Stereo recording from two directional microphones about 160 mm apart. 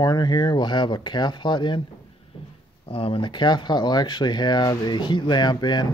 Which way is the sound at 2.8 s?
35° left (ahead or behind).